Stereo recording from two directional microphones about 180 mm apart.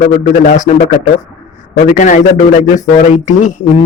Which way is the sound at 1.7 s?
45° left (ahead or behind).